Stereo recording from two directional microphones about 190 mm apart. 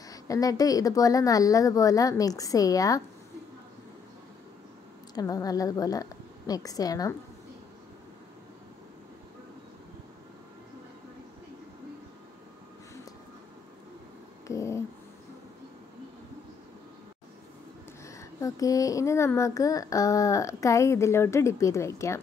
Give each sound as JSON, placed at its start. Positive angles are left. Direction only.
{"t": 0.1, "sound": "a child's voice", "side_deg": 20}
{"t": 5.1, "sound": "a woman's voice", "side_deg": 20}
{"t": 14.5, "sound": "a sound", "side_deg": 15}
{"t": 18.0, "sound": "a child's voice", "side_deg": 15}